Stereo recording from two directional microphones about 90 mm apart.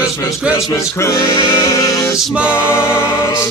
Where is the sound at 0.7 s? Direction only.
35° left (ahead or behind).